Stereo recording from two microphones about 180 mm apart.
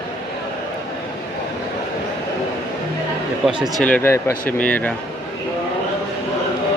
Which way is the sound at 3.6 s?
10° left (ahead or behind).